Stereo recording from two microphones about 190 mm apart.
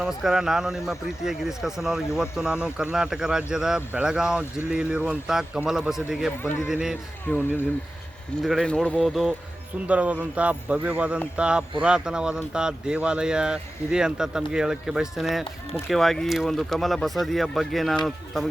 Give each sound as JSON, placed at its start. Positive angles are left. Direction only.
{"t": 0.0, "sound": "speech", "side_deg": 0}
{"t": 6.4, "sound": "speech", "side_deg": 10}
{"t": 6.7, "sound": "speech", "side_deg": -5}
{"t": 7.3, "sound": "speech", "side_deg": 10}